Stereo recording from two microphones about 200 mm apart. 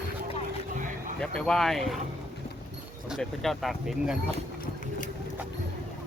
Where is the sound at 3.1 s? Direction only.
Centre (ahead or behind).